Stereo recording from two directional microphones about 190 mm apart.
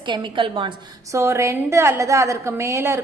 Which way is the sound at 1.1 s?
15° right (ahead or behind).